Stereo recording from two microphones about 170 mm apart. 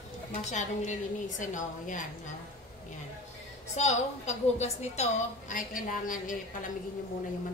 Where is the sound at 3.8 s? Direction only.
40° left (ahead or behind).